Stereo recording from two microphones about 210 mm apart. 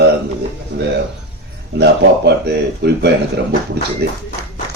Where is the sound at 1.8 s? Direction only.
55° right (ahead or behind).